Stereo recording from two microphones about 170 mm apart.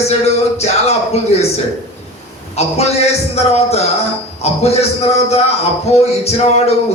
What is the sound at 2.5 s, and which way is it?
A man's voice, 40° left (ahead or behind).